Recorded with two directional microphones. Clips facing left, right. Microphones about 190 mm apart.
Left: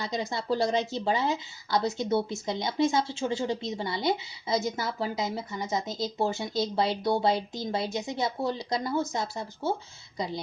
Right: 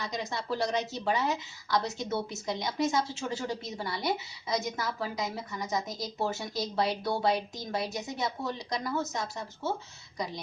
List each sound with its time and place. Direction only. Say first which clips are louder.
0.0 s a woman's voice: left 3 dB; 30° left (ahead or behind)